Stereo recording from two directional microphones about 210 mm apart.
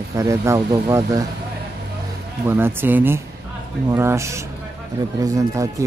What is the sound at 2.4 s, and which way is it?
Speech, 10° right (ahead or behind).